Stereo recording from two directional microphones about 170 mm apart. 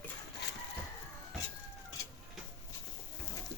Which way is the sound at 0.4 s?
80° left.